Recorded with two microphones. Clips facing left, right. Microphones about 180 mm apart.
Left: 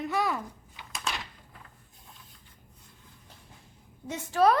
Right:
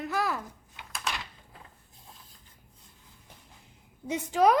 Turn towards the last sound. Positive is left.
turn(degrees=-15)  # may be behind; listen again after turning